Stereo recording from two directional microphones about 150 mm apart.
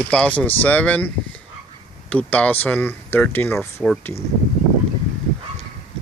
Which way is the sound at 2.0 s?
10° left (ahead or behind).